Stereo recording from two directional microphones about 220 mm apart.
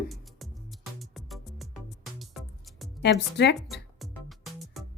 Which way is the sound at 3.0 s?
50° left (ahead or behind).